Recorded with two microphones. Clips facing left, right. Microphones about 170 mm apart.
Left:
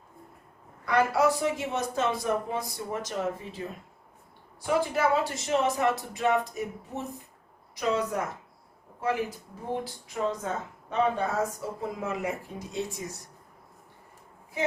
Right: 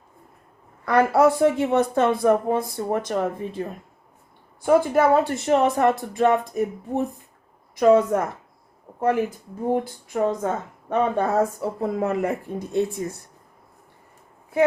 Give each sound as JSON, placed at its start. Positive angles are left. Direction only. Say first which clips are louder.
{"t": 0.9, "sound": "a woman's voice", "louder": "right 6 dB", "side_deg": -55}
{"t": 9.7, "sound": "a woman's voice", "louder": "right 5 dB", "side_deg": -55}